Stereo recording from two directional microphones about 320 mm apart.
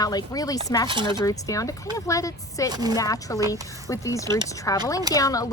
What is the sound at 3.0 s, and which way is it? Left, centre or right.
Speech, centre.